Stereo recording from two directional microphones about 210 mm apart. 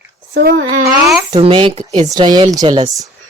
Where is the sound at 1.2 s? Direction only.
25° right (ahead or behind).